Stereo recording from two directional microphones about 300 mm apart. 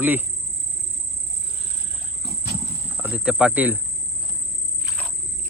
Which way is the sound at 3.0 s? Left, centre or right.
Centre.